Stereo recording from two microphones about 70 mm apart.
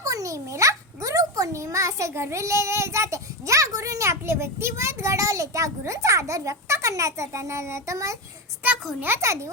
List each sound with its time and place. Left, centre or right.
0.0 s a child's voice: right
9.2 s a child's voice: right